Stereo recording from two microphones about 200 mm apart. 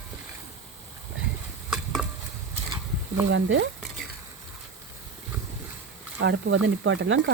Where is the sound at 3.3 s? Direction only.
70° right (ahead or behind).